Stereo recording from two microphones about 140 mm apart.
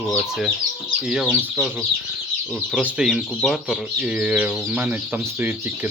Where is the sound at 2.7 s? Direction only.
10° right (ahead or behind).